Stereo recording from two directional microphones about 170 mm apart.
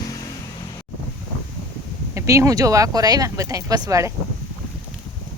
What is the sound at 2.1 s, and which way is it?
Speech, 20° right (ahead or behind).